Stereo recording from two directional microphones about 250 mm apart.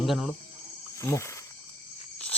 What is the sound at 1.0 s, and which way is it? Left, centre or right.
Speech, centre.